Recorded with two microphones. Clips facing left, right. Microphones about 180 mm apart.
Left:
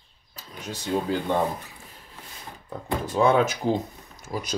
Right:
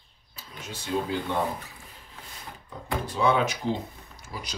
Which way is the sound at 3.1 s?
45° left (ahead or behind).